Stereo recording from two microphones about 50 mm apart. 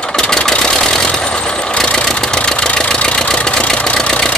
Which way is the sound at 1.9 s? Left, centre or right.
Centre.